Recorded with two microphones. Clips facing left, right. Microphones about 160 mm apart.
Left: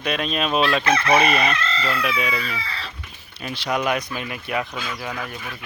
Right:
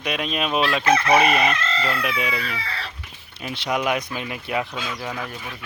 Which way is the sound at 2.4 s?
60° right (ahead or behind).